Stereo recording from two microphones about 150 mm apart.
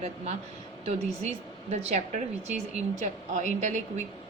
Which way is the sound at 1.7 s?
50° right (ahead or behind).